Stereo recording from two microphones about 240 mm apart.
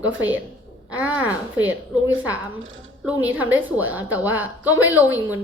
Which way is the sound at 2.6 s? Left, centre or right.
Right.